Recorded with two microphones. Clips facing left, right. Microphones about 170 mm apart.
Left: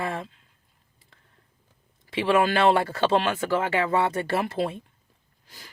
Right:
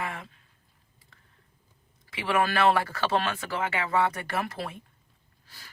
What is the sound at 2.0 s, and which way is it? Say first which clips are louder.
Speech: left 5 dB; 25° left (ahead or behind).